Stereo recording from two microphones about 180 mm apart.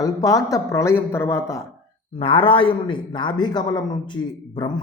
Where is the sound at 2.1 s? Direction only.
30° left (ahead or behind).